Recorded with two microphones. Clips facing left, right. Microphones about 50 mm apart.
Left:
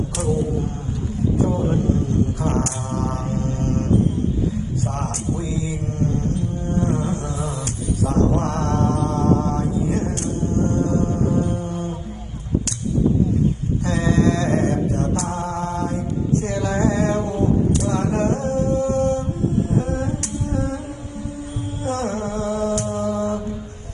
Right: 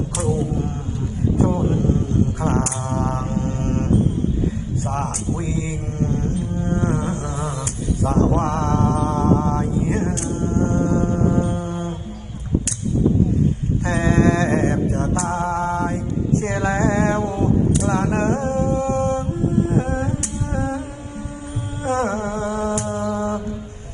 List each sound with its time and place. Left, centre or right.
0.2 s music: right
1.8 s music: right
4.8 s music: right
13.8 s mantra: right
19.7 s music: right
21.8 s music: right